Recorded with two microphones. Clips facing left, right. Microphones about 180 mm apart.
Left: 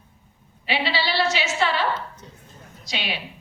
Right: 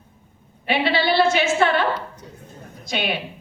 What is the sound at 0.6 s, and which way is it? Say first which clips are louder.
A woman's voice: right 5 dB; 55° right (ahead or behind).